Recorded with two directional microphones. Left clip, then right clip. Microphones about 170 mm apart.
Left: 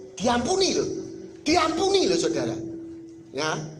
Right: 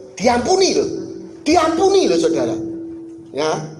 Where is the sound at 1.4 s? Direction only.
25° left (ahead or behind).